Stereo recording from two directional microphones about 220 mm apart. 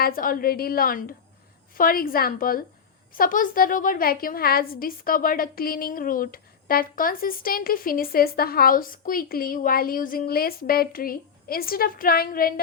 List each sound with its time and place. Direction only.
0.0 s a woman's voice: 40° left (ahead or behind)